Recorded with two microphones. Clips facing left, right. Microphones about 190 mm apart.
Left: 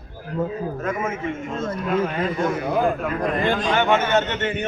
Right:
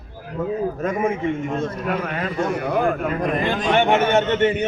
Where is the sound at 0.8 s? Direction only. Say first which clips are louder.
Right 4 dB; 15° right (ahead or behind).